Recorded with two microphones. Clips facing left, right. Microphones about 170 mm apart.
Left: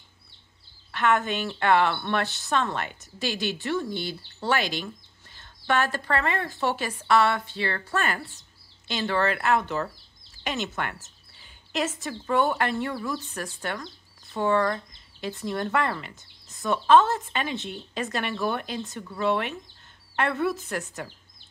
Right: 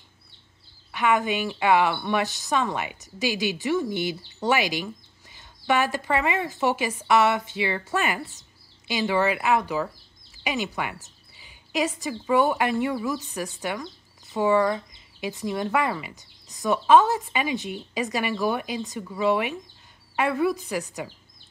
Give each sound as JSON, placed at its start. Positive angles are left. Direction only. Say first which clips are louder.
{"t": 0.9, "sound": "speech", "louder": "right 1 dB", "side_deg": -10}
{"t": 13.3, "sound": "a woman's voice", "louder": "right 3 dB", "side_deg": 0}